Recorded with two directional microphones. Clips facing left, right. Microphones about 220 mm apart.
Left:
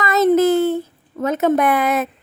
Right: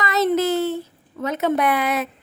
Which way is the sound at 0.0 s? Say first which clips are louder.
Left 5 dB; 45° left (ahead or behind).